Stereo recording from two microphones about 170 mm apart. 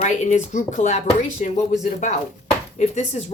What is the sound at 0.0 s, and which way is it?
Speech, 45° left (ahead or behind).